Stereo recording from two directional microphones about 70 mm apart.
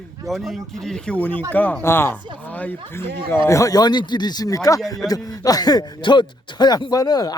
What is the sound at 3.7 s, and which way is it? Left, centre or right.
Speech, left.